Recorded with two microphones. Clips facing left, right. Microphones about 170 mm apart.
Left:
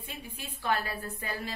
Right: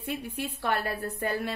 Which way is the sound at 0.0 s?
65° right (ahead or behind).